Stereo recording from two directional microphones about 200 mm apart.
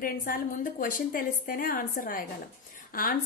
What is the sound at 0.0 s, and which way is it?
A woman's voice, 45° left (ahead or behind).